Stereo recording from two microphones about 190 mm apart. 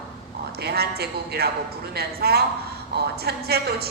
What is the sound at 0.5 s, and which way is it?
A woman's voice, 55° right (ahead or behind).